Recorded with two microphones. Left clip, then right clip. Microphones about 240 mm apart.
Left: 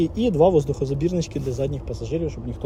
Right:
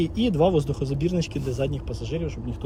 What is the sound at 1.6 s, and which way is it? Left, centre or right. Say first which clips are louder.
Speech: left 2 dB; left.